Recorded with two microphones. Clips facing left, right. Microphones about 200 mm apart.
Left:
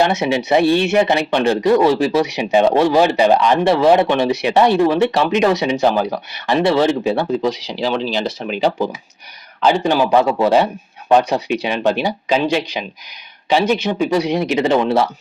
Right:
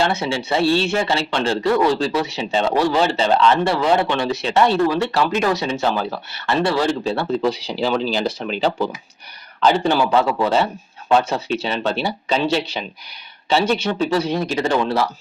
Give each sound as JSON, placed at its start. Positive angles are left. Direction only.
{"t": 0.0, "sound": "speech", "side_deg": 20}
{"t": 7.7, "sound": "speech", "side_deg": 0}
{"t": 9.8, "sound": "speech", "side_deg": 15}